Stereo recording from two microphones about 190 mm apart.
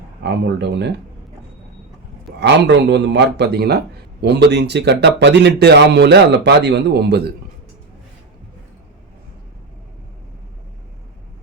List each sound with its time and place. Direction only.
0.2 s a man's voice: 65° right (ahead or behind)
2.4 s a man's voice: 65° right (ahead or behind)